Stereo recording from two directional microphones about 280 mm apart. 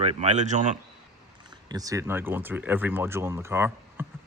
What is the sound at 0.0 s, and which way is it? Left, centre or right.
Speech, right.